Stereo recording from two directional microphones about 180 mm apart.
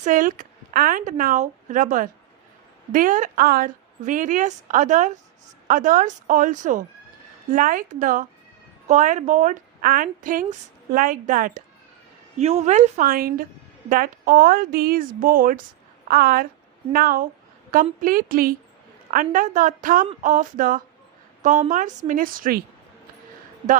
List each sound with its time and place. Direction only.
0.0 s a woman's voice: 50° right (ahead or behind)
12.4 s a woman's voice: 35° right (ahead or behind)